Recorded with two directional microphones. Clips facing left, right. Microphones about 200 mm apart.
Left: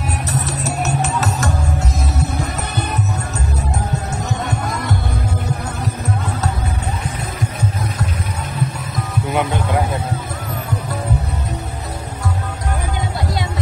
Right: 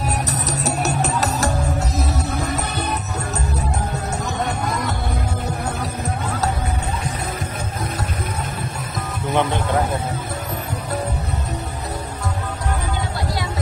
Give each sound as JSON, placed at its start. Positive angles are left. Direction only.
{"t": 0.0, "sound": "music", "side_deg": -40}